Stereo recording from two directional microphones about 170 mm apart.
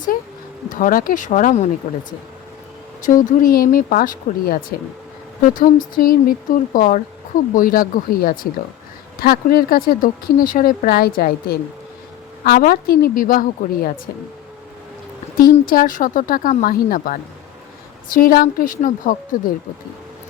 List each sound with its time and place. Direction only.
0.7 s speech: 55° left (ahead or behind)
3.1 s speech: 55° left (ahead or behind)
15.4 s speech: 55° left (ahead or behind)